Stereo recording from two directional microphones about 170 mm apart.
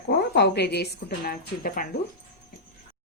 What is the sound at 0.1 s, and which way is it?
A woman's voice, 75° left (ahead or behind).